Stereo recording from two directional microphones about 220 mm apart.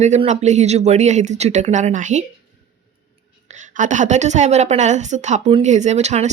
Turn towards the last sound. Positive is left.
turn(degrees=-30)  # may be behind; listen again after turning